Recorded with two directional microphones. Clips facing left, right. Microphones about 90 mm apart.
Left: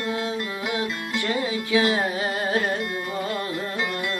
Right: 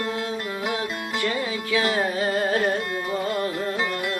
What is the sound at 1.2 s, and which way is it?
Music, 25° left (ahead or behind).